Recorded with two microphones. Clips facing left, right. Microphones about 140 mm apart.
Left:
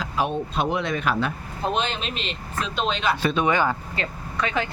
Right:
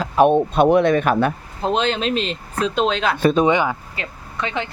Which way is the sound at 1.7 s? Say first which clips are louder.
Right 7 dB; 90° right.